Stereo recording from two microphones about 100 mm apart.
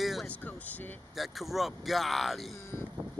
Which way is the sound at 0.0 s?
Centre (ahead or behind).